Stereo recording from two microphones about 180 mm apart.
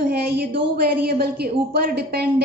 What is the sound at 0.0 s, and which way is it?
A woman's voice, 60° right (ahead or behind).